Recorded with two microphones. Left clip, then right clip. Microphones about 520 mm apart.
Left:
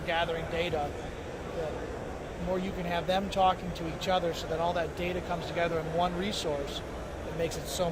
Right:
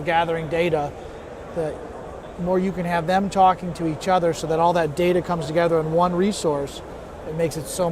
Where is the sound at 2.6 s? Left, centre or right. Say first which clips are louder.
Right 9 dB; right.